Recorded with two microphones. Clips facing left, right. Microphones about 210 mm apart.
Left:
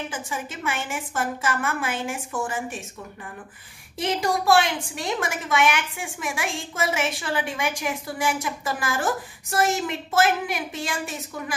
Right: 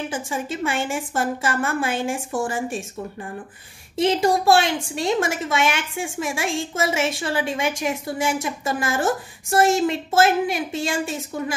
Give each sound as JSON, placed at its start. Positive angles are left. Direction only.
{"t": 0.1, "sound": "a woman's voice", "side_deg": -30}